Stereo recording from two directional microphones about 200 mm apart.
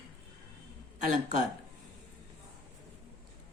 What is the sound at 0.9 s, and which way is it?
Speech, 40° right (ahead or behind).